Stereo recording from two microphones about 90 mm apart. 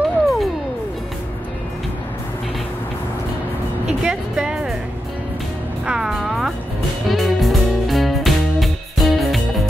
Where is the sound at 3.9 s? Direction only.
5° right (ahead or behind).